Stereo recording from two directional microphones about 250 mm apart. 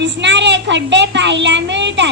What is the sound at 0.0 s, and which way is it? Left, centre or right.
A woman's voice, right.